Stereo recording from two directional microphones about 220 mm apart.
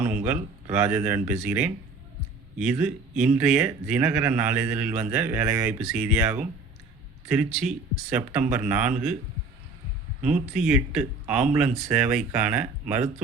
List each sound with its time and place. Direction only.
0.0 s a man's voice: 5° right (ahead or behind)
10.5 s speech: 5° right (ahead or behind)